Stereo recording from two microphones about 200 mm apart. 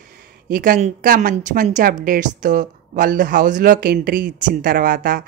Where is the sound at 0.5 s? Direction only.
45° right (ahead or behind).